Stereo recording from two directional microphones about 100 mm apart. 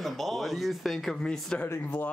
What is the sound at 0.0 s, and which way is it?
Speech, centre (ahead or behind).